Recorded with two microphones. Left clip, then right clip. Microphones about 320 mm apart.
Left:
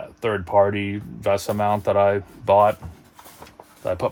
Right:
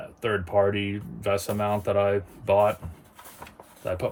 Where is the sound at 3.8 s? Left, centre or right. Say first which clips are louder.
Left 5 dB; left.